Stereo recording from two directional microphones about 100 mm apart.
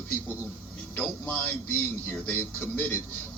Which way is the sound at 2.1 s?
15° left (ahead or behind).